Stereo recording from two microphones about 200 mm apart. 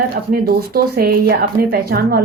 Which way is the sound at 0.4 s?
50° right (ahead or behind).